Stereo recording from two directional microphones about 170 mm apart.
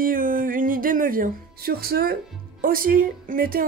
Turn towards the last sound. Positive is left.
turn(degrees=-55)  # may be behind; listen again after turning